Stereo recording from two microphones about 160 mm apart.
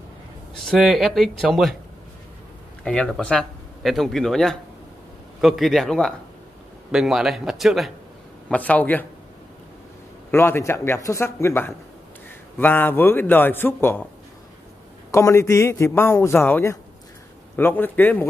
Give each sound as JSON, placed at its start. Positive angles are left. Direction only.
{"t": 0.6, "sound": "speech", "side_deg": 0}
{"t": 2.8, "sound": "speech", "side_deg": 5}
{"t": 8.5, "sound": "a man's voice", "side_deg": 10}
{"t": 10.3, "sound": "a man's voice", "side_deg": 15}
{"t": 15.0, "sound": "a man's voice", "side_deg": 20}